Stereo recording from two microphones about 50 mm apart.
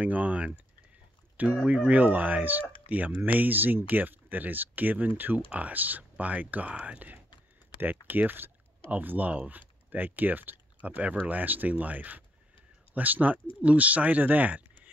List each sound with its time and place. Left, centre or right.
0.0 s speech: right
1.3 s a sound: right
1.7 s speech: right